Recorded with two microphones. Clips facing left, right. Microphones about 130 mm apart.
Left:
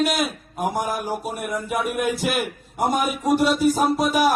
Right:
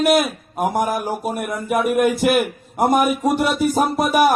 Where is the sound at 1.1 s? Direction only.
50° right (ahead or behind).